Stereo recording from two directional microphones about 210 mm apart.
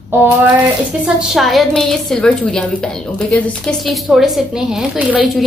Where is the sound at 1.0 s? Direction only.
Centre (ahead or behind).